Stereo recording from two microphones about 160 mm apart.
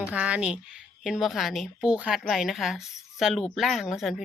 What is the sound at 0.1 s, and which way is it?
A woman's voice, 5° right (ahead or behind).